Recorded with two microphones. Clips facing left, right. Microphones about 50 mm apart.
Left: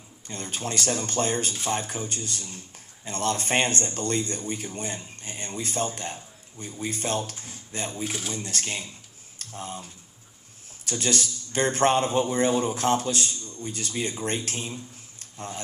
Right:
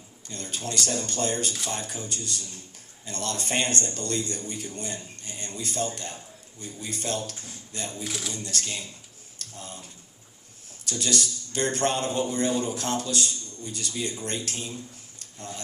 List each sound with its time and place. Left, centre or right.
0.3 s a man's voice: left